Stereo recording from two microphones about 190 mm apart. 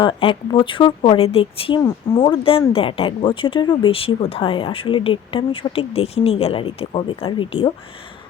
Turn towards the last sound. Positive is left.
turn(degrees=30)  # may be behind; listen again after turning